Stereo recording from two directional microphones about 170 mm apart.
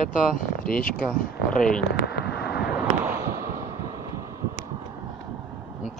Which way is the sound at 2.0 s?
75° left (ahead or behind).